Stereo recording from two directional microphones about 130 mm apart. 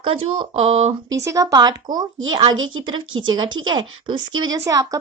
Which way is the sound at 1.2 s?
25° right (ahead or behind).